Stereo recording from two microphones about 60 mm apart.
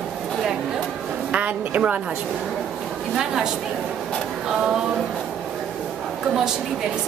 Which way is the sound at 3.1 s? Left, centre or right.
Centre.